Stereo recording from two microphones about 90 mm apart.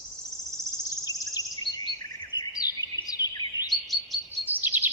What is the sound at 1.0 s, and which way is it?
Bird vocalization, 45° left (ahead or behind).